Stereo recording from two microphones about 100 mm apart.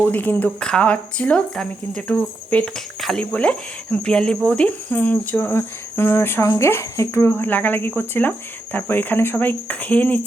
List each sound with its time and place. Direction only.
0.0 s speech: 20° left (ahead or behind)
4.4 s cricket: 10° left (ahead or behind)